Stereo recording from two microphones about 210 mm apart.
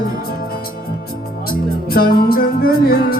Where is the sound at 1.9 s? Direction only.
45° left (ahead or behind).